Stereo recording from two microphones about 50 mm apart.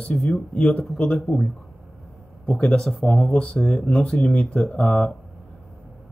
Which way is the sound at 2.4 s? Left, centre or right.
Centre.